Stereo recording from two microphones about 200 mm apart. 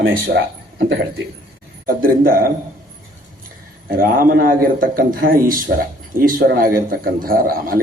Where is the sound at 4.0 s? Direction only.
45° right (ahead or behind).